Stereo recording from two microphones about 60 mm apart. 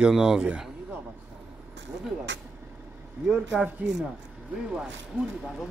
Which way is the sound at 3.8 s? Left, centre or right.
Right.